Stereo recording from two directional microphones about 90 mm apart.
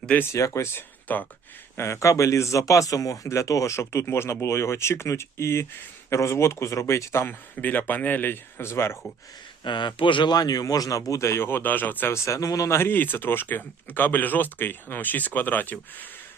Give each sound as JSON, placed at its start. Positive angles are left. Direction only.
{"t": 0.2, "sound": "speech", "side_deg": 35}
{"t": 1.7, "sound": "speech", "side_deg": 30}
{"t": 9.6, "sound": "speech", "side_deg": 60}
{"t": 12.1, "sound": "speech", "side_deg": 35}